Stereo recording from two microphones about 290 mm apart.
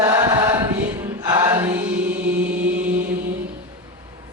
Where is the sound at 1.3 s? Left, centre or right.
Centre.